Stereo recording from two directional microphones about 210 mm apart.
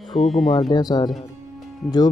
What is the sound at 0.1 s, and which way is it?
Speech, centre (ahead or behind).